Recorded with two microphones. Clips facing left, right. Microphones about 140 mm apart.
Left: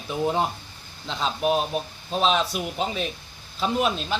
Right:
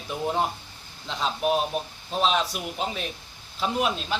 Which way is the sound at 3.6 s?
Centre (ahead or behind).